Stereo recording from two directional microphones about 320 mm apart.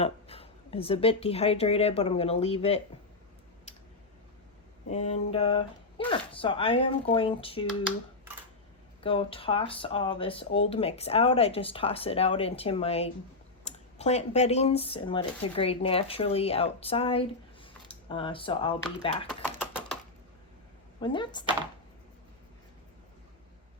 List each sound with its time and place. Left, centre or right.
0.0 s speech: centre
3.7 s a sound: left
4.9 s a sound: left
6.1 s speech: centre
9.0 s speech: centre
19.5 s typing: centre
21.0 s speech: centre